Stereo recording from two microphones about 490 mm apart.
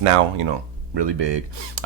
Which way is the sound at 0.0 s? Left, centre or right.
Right.